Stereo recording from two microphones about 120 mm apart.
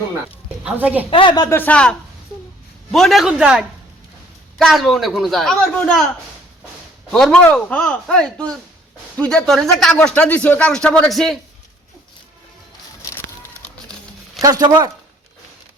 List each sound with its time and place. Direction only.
0.6 s a woman's voice: 15° right (ahead or behind)
1.1 s speech: 40° left (ahead or behind)
1.5 s a man's voice: 15° left (ahead or behind)
7.1 s speech: 5° left (ahead or behind)
13.1 s a sound: 20° left (ahead or behind)
14.4 s speech: 30° right (ahead or behind)